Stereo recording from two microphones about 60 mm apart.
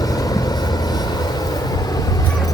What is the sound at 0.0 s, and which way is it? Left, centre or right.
Vehicle, left.